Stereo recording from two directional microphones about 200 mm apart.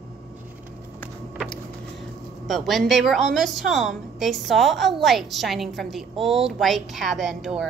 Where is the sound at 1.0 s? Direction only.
5° left (ahead or behind).